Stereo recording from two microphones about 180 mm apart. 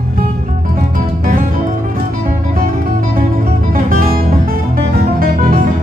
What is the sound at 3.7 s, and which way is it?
Music, 55° right (ahead or behind).